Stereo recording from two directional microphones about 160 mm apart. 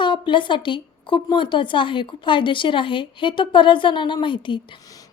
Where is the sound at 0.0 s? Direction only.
30° left (ahead or behind).